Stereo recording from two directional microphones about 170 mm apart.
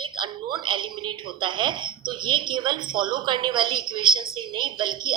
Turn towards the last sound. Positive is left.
turn(degrees=-25)  # may be behind; listen again after turning